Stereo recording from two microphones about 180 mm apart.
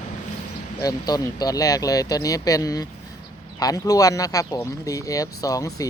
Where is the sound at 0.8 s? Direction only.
20° left (ahead or behind).